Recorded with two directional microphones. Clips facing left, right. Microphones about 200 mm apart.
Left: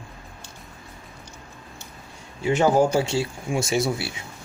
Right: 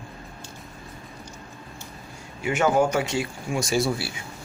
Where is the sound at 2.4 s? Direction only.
30° left (ahead or behind).